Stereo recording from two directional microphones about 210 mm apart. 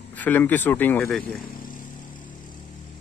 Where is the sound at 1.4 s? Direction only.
45° left (ahead or behind).